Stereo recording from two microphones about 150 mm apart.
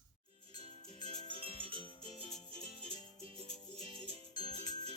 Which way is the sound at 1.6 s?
35° right (ahead or behind).